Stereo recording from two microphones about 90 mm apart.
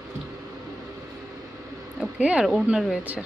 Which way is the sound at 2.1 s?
15° right (ahead or behind).